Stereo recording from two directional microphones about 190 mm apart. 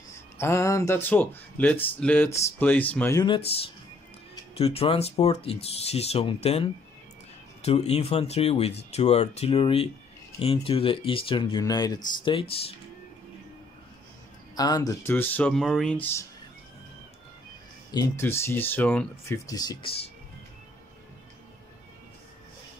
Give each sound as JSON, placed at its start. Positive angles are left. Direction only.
{"t": 0.1, "sound": "speech", "side_deg": 15}
{"t": 3.3, "sound": "speech", "side_deg": 30}
{"t": 14.5, "sound": "speech", "side_deg": 20}
{"t": 17.9, "sound": "speech", "side_deg": 15}